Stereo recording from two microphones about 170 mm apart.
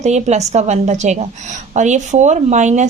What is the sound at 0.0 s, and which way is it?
A woman's voice, 40° right (ahead or behind).